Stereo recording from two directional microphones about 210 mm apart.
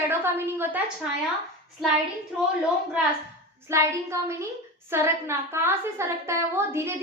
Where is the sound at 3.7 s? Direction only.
15° right (ahead or behind).